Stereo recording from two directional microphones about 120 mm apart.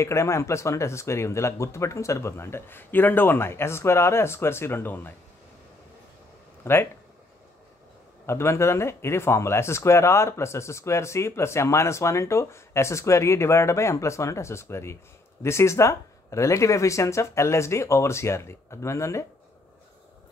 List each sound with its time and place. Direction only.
0.0 s speech: 25° left (ahead or behind)
6.6 s speech: 20° left (ahead or behind)
8.3 s speech: 20° left (ahead or behind)